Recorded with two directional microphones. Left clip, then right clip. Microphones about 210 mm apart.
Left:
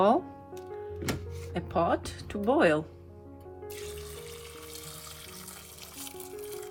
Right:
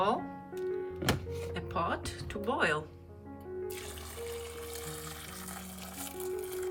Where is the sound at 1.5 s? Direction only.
20° left (ahead or behind).